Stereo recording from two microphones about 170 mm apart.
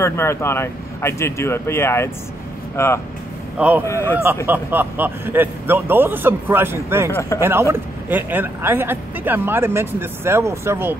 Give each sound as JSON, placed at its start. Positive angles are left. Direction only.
{"t": 0.0, "sound": "speech", "side_deg": 15}
{"t": 3.5, "sound": "speech", "side_deg": -10}
{"t": 3.8, "sound": "speech", "side_deg": 15}
{"t": 4.5, "sound": "speech", "side_deg": -10}